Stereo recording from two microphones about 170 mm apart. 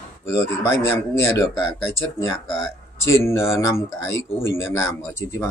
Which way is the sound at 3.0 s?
15° left (ahead or behind).